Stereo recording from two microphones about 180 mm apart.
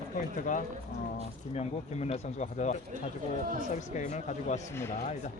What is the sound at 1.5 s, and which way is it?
Speech, 35° left (ahead or behind).